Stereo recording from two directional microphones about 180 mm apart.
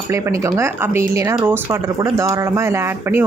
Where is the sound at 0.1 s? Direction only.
15° right (ahead or behind).